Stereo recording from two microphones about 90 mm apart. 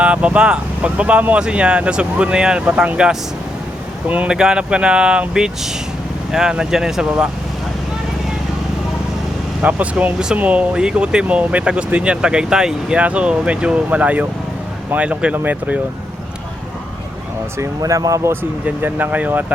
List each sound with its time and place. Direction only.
0.0 s speech: 15° right (ahead or behind)
4.1 s speech: 10° right (ahead or behind)
9.6 s speech: 15° right (ahead or behind)
17.7 s speech: 40° right (ahead or behind)
18.6 s speech: 20° right (ahead or behind)